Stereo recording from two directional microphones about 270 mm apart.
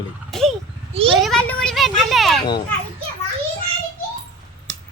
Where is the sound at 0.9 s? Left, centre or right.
Right.